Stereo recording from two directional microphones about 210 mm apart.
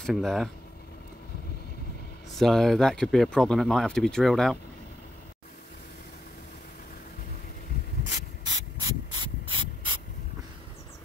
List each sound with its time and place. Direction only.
0.0 s speech: centre (ahead or behind)
2.3 s speech: centre (ahead or behind)
8.5 s mechanisms: 20° right (ahead or behind)